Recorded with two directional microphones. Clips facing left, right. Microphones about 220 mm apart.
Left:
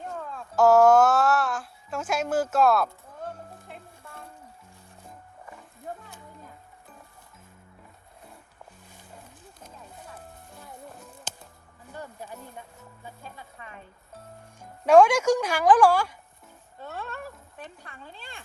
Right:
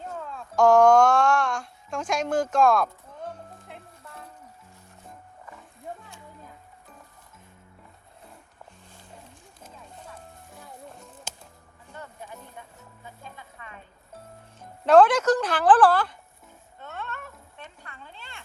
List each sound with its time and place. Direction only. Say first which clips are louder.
0.0 s music: even; centre (ahead or behind)
10.2 s music: even; centre (ahead or behind)
14.6 s speech: even; 10° left (ahead or behind)
16.8 s a sound: left 2 dB; 35° left (ahead or behind)